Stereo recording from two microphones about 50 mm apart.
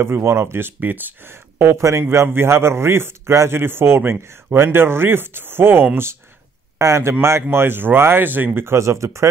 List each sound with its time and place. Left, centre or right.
0.0 s a man's voice: right
0.7 s speech: right
1.3 s speech: right
1.8 s a man's voice: right
2.2 s a man's voice: right
6.8 s a man's voice: right
7.5 s speech: right
8.5 s speech: right